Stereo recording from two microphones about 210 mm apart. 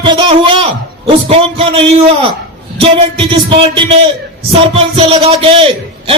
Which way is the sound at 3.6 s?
25° right (ahead or behind).